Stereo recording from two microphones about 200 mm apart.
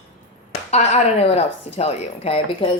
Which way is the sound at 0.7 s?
35° left (ahead or behind).